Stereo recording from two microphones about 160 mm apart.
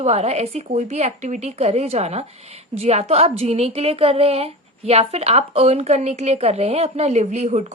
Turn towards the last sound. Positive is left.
turn(degrees=-45)  # may be behind; listen again after turning